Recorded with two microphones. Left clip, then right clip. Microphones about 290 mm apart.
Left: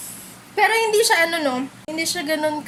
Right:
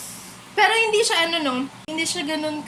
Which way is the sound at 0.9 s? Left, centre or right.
Left.